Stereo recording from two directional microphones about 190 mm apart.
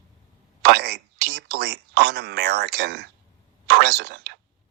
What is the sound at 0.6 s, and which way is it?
Speech, 55° right (ahead or behind).